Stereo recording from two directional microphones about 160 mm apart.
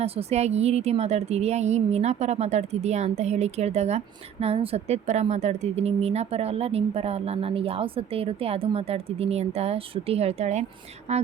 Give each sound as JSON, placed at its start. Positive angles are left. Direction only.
{"t": 0.0, "sound": "a woman's voice", "side_deg": -40}